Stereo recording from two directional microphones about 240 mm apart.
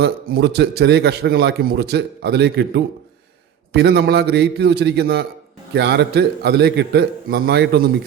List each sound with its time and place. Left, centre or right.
0.0 s a man's voice: right